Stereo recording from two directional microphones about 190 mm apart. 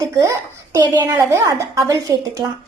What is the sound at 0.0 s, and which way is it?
A child's voice, 15° right (ahead or behind).